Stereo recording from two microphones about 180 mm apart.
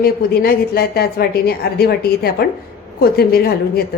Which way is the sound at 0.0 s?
60° left (ahead or behind).